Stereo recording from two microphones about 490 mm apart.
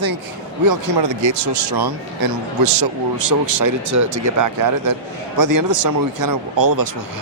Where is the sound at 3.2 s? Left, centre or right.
Right.